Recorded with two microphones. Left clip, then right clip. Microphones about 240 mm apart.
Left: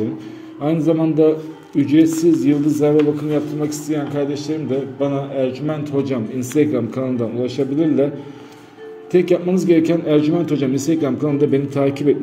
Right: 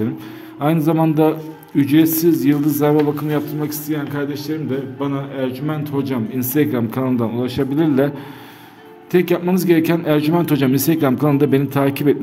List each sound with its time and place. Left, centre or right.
0.7 s a man's voice: right
9.1 s a man's voice: right